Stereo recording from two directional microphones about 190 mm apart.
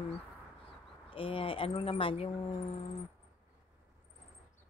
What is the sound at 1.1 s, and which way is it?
Speech, 30° left (ahead or behind).